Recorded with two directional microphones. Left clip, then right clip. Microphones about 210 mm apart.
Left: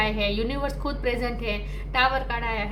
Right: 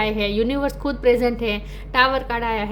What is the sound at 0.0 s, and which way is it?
A woman's voice, 50° right (ahead or behind).